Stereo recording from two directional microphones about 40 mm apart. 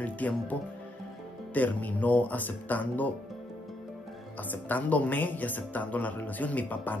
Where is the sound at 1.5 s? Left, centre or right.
Left.